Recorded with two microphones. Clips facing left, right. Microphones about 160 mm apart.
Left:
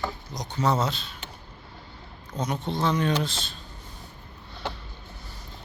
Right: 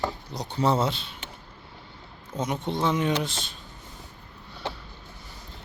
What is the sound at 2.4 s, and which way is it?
Speech, 20° right (ahead or behind).